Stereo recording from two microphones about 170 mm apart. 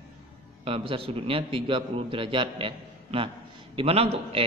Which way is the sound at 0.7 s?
35° right (ahead or behind).